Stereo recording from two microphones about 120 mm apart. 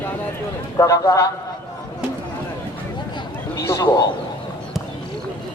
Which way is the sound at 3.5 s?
25° left (ahead or behind).